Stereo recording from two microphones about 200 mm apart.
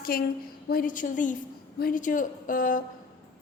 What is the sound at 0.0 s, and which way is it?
A woman's voice, 50° left (ahead or behind).